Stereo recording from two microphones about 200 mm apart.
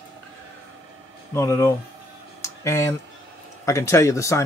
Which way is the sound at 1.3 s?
15° left (ahead or behind).